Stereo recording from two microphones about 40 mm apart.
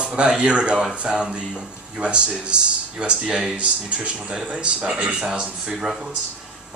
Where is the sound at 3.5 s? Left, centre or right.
Right.